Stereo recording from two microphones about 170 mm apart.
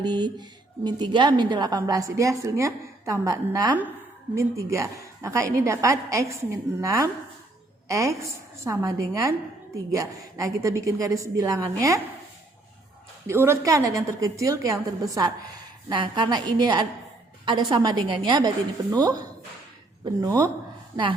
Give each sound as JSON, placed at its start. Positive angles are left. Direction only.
{"t": 0.0, "sound": "a woman's voice", "side_deg": -25}
{"t": 13.2, "sound": "a woman's voice", "side_deg": -15}
{"t": 20.9, "sound": "a woman's voice", "side_deg": -30}